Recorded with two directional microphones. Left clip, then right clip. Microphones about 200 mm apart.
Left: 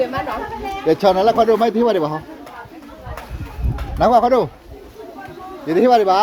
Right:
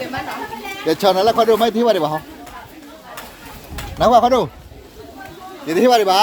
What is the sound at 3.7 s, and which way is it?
Speech, 15° right (ahead or behind).